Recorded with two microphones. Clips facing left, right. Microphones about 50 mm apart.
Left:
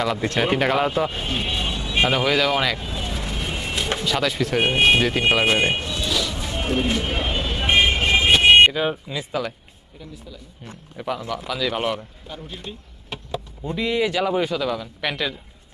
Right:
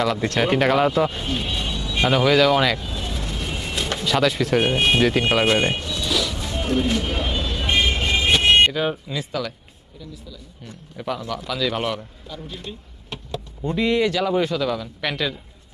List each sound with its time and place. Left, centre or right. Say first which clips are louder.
0.0 s speech: right 1 dB; centre
1.2 s a sound: left 1 dB; centre
2.0 s speech: right 5 dB; centre
2.7 s vehicle: even; centre
4.7 s speech: left 1 dB; centre
5.5 s a sound: even; centre
6.1 s music: right 2 dB; centre
6.4 s vehicle: right 1 dB; centre
8.3 s speech: left 3 dB; centre
10.0 s a man's voice: even; left
10.9 s speech: even; centre
12.5 s a sound: right 1 dB; centre
14.1 s speech: right 1 dB; centre